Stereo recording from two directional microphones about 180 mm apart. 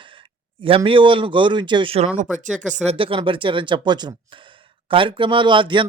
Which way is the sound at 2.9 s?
30° right (ahead or behind).